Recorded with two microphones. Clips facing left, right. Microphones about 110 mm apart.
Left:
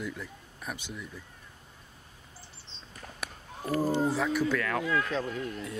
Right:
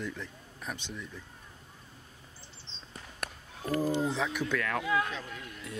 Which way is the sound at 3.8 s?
45° left (ahead or behind).